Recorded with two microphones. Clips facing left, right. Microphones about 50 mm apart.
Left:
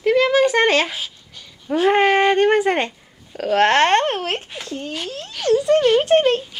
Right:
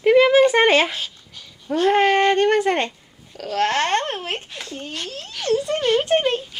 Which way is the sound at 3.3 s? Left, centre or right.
Left.